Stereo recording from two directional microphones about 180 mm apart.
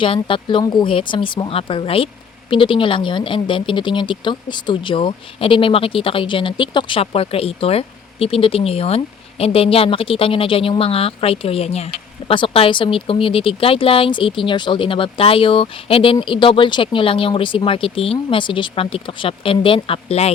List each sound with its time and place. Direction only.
0.0 s speech: 30° left (ahead or behind)